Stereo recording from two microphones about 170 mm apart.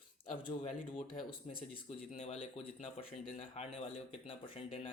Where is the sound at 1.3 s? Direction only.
35° left (ahead or behind).